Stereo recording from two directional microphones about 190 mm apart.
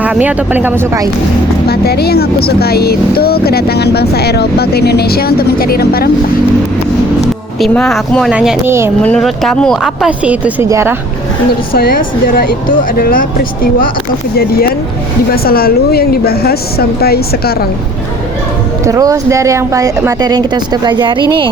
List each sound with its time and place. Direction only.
0.0 s a woman's voice: 10° right (ahead or behind)
1.6 s speech: 55° left (ahead or behind)
7.6 s speech: 5° left (ahead or behind); by 8.9 s 10° right (ahead or behind)
9.0 s speech: 5° left (ahead or behind); by 10.9 s 15° right (ahead or behind)
11.7 s speech: 50° left (ahead or behind)
18.9 s a woman's voice: 20° right (ahead or behind)